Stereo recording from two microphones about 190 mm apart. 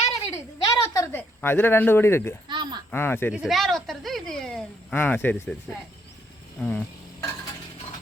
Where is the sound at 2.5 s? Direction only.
25° right (ahead or behind).